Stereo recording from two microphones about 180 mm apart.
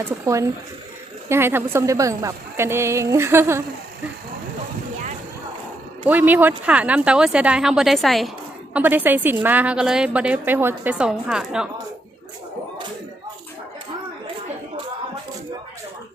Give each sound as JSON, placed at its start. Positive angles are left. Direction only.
{"t": 0.3, "sound": "a woman's voice", "side_deg": -15}
{"t": 6.1, "sound": "speech", "side_deg": -10}
{"t": 8.7, "sound": "a woman's voice", "side_deg": -10}